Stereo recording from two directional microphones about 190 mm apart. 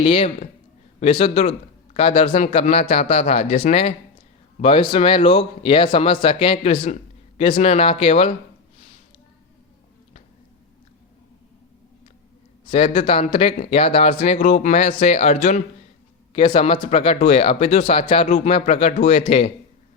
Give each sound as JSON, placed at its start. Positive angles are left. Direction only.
{"t": 0.0, "sound": "speech", "side_deg": 30}
{"t": 12.7, "sound": "speech", "side_deg": 30}